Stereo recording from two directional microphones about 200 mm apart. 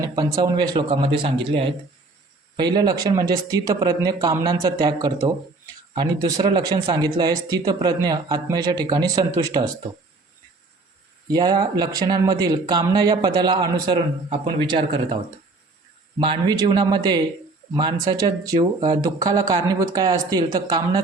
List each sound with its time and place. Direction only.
0.0 s speech: 20° right (ahead or behind)
11.3 s speech: 20° right (ahead or behind)
16.2 s speech: 20° right (ahead or behind)